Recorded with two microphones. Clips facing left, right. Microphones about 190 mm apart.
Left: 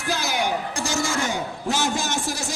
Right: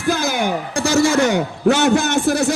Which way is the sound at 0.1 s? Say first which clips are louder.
Right 6 dB; 50° right (ahead or behind).